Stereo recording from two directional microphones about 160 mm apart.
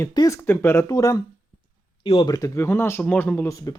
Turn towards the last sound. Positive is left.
turn(degrees=15)  # may be behind; listen again after turning